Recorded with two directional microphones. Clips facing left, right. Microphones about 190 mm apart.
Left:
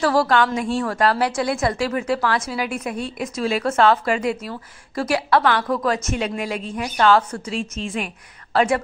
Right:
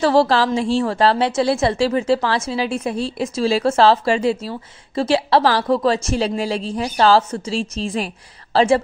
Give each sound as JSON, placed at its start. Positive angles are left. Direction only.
{"t": 0.0, "sound": "a woman's voice", "side_deg": -25}